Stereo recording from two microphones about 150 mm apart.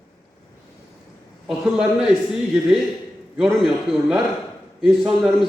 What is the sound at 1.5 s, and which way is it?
Speech, 5° right (ahead or behind).